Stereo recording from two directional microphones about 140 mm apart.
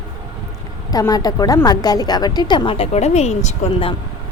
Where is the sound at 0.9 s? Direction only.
25° left (ahead or behind); by 3.9 s 55° left (ahead or behind).